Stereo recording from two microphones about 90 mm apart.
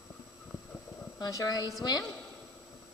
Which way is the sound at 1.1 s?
45° left (ahead or behind).